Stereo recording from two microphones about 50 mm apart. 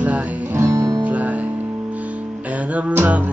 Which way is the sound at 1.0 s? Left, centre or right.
Right.